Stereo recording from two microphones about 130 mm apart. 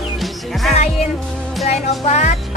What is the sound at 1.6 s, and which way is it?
Music, 60° left (ahead or behind).